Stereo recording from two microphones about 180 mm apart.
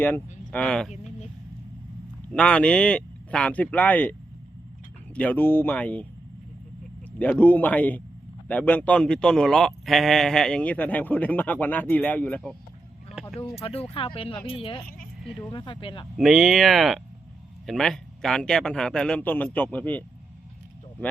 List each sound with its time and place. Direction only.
0.0 s a man's voice: 10° left (ahead or behind)
2.3 s a man's voice: 5° left (ahead or behind)
5.1 s a man's voice: 10° left (ahead or behind)
7.2 s a man's voice: 10° left (ahead or behind)
13.6 s speech: 30° left (ahead or behind)
16.1 s a man's voice: centre (ahead or behind)